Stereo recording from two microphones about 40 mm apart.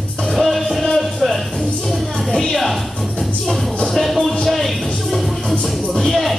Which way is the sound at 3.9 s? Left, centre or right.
Centre.